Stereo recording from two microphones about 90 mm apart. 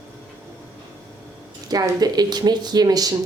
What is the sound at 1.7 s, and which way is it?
A woman's voice, 45° right (ahead or behind).